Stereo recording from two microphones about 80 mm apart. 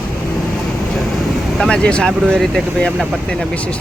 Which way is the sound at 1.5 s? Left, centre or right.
Centre.